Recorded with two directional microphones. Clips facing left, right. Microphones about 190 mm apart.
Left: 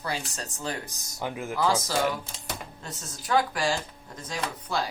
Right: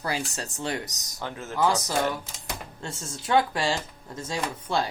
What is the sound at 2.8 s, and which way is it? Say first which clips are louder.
Speech: right 4 dB; 25° right (ahead or behind).